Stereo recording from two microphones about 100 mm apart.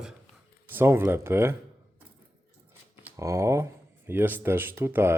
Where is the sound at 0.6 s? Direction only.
25° right (ahead or behind).